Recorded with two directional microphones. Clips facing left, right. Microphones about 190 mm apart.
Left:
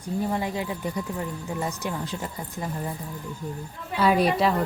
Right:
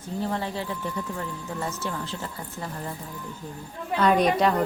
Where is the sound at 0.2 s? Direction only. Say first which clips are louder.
Left 1 dB; 15° left (ahead or behind).